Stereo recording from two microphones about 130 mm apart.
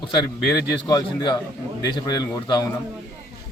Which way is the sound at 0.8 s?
30° left (ahead or behind).